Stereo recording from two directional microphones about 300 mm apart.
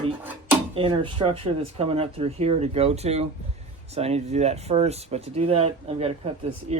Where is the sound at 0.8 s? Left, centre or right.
Centre.